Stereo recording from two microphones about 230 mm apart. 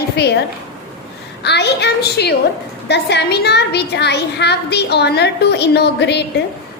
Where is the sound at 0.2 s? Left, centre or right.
Left.